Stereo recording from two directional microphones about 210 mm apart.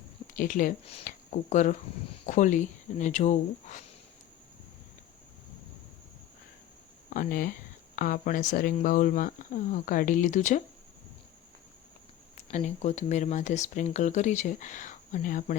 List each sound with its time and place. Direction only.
0.3 s speech: 40° left (ahead or behind)
7.1 s speech: 40° left (ahead or behind)
12.5 s speech: 30° left (ahead or behind)